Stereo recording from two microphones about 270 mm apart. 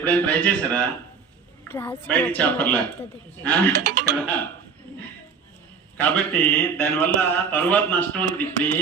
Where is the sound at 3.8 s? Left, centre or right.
Right.